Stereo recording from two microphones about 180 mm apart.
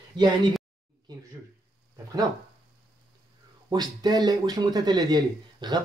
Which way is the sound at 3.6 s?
20° right (ahead or behind).